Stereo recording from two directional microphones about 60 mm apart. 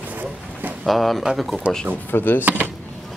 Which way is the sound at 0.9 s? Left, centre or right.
Centre.